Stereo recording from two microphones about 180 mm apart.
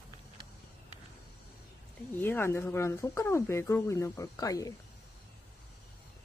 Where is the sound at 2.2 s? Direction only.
10° left (ahead or behind).